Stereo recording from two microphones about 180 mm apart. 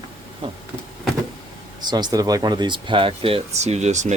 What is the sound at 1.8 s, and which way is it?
Speech, 25° right (ahead or behind).